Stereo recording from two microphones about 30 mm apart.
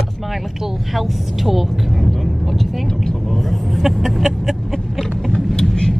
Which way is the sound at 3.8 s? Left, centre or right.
Centre.